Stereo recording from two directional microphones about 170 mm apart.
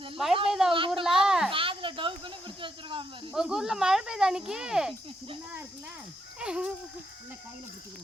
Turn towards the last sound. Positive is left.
turn(degrees=-5)  # may be behind; listen again after turning